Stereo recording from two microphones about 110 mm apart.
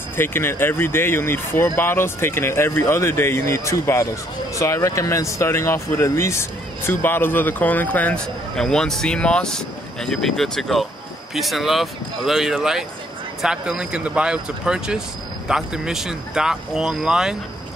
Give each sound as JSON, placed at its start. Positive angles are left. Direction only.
{"t": 0.2, "sound": "a man's voice", "side_deg": 20}